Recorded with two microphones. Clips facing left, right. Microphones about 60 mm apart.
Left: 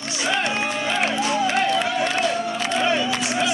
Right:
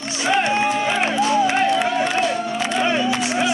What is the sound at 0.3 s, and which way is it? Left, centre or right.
Music, right.